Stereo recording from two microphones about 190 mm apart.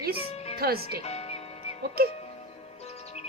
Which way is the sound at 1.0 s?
35° left (ahead or behind).